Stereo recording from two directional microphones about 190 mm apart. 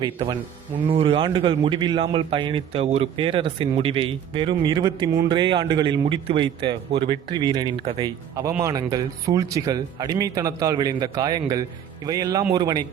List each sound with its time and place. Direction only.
0.0 s a man's voice: 25° right (ahead or behind)